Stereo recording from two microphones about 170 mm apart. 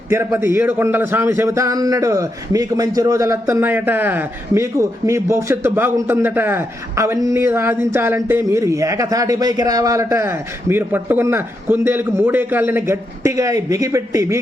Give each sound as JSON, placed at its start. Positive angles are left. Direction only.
{"t": 0.1, "sound": "a man's voice", "side_deg": -15}